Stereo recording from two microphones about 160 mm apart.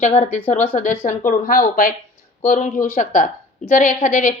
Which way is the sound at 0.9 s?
55° left (ahead or behind).